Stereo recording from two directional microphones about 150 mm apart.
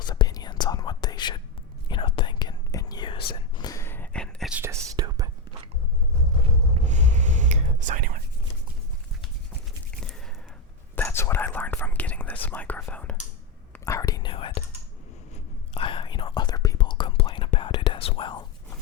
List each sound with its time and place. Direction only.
0.0 s whispering: 30° left (ahead or behind); by 4.5 s 5° left (ahead or behind)
4.5 s whispering: 15° right (ahead or behind)
6.4 s whispering: 50° right (ahead or behind)
10.0 s a sound: 5° left (ahead or behind)
10.9 s whispering: 15° left (ahead or behind); by 14.6 s 35° left (ahead or behind)
15.7 s whispering: 35° left (ahead or behind)